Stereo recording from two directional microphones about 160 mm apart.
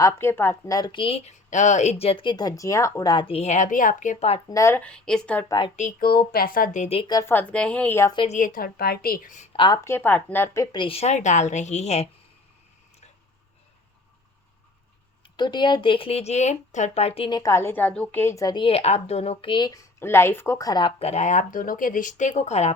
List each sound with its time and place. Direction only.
0.0 s speech: 15° left (ahead or behind); by 4.4 s 45° left (ahead or behind)
4.4 s speech: 20° left (ahead or behind)
4.8 s a woman's voice: 5° left (ahead or behind)
5.5 s speech: 30° left (ahead or behind)
6.0 s a woman's voice: 70° left (ahead or behind); by 7.1 s 40° left (ahead or behind)
7.1 s speech: 15° left (ahead or behind)
8.3 s a woman's voice: 55° left (ahead or behind)
9.5 s speech: 30° left (ahead or behind)
10.8 s speech: 35° left (ahead or behind)
15.2 s speech: 30° left (ahead or behind)
20.0 s speech: 15° left (ahead or behind)
21.0 s speech: 45° left (ahead or behind)